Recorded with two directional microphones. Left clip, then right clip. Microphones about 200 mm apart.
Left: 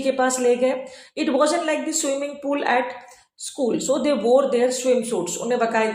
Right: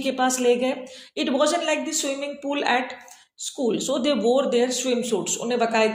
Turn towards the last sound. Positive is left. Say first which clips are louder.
# left 1 dB
turn(degrees=-40)  # may be behind; listen again after turning